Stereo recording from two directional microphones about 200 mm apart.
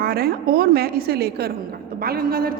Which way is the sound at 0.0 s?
50° right (ahead or behind).